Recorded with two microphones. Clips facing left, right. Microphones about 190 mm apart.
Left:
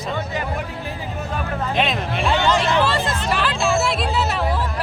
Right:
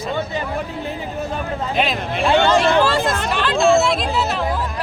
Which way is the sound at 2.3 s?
60° right (ahead or behind).